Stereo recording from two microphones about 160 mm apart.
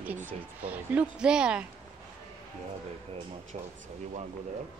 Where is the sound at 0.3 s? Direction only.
10° right (ahead or behind).